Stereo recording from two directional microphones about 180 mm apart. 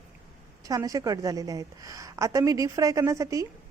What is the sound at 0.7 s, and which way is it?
A woman's voice, 20° right (ahead or behind).